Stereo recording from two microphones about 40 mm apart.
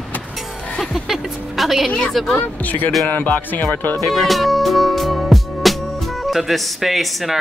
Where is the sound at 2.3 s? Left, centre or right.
Left.